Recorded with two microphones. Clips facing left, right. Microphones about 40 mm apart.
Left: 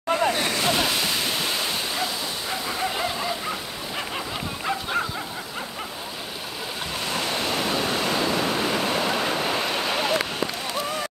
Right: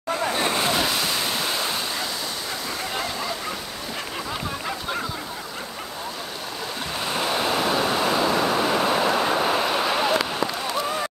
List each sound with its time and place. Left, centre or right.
0.3 s waves: right
0.7 s waves: centre
2.8 s a sound: centre
7.1 s waves: centre